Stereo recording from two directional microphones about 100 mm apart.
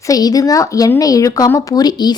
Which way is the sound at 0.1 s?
40° left (ahead or behind).